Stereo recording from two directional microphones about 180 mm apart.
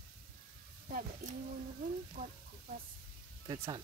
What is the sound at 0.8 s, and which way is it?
Speech, 45° right (ahead or behind).